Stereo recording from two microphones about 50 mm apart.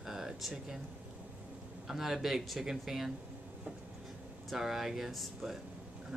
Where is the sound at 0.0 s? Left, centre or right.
Centre.